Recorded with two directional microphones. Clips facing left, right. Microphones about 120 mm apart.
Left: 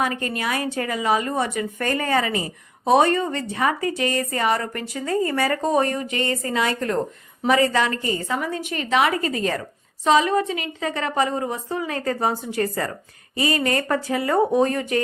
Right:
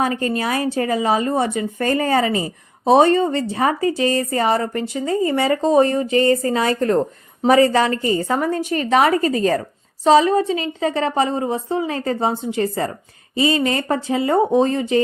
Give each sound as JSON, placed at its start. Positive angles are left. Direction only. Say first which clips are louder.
{"t": 0.0, "sound": "a woman's voice", "louder": "right 4 dB", "side_deg": -30}